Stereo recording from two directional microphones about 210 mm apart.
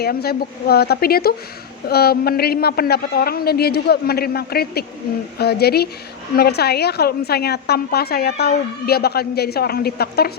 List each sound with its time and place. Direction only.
0.0 s a woman's voice: 50° left (ahead or behind)